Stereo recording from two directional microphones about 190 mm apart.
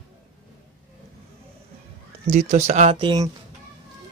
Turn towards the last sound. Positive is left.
turn(degrees=-20)  # may be behind; listen again after turning